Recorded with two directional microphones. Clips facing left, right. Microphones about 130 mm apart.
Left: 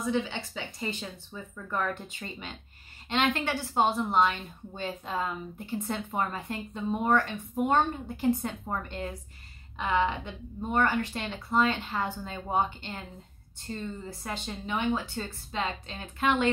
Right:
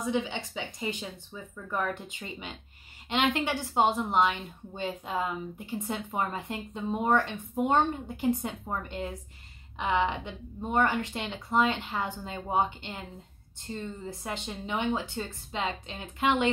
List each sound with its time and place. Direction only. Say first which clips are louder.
0.0 s a woman's voice: even; 15° right (ahead or behind)